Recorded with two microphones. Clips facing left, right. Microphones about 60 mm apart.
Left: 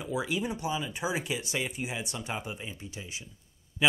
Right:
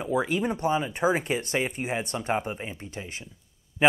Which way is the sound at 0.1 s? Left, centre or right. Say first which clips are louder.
Right 5 dB; right.